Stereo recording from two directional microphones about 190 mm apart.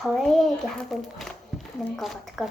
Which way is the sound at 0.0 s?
Centre (ahead or behind).